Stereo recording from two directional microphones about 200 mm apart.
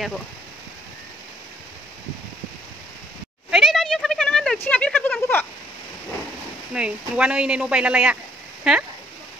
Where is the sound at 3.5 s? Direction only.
Centre (ahead or behind).